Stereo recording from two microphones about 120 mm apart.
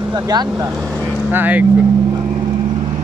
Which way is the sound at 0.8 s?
10° right (ahead or behind).